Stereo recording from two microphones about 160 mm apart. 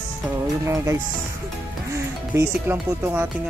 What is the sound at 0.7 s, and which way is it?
Speech, 20° right (ahead or behind).